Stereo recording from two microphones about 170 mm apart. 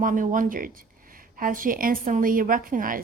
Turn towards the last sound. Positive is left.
turn(degrees=-55)  # may be behind; listen again after turning